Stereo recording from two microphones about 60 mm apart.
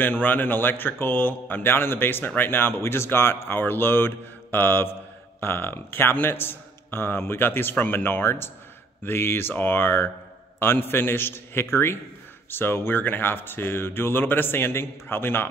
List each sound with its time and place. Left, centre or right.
0.0 s speech: left